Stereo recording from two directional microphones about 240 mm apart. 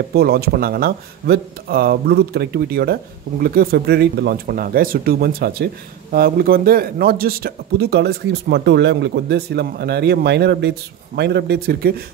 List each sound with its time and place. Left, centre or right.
0.1 s a man's voice: right